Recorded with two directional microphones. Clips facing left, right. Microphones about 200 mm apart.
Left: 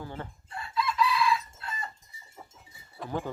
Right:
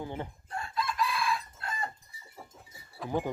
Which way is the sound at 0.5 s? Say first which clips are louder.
Left 3 dB; 50° right (ahead or behind).